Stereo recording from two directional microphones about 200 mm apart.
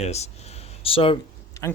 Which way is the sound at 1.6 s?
15° left (ahead or behind).